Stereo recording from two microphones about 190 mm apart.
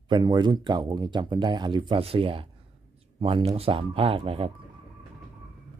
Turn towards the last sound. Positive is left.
turn(degrees=-30)  # may be behind; listen again after turning